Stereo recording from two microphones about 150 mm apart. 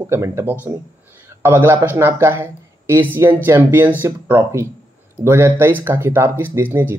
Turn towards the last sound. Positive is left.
turn(degrees=-15)  # may be behind; listen again after turning